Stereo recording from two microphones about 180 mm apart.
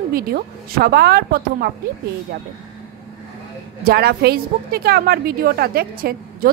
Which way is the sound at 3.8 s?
60° right (ahead or behind).